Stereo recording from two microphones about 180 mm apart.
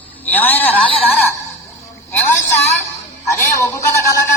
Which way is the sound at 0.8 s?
30° left (ahead or behind).